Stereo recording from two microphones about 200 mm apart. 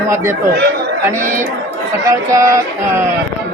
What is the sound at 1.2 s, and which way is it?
Speech, 40° right (ahead or behind).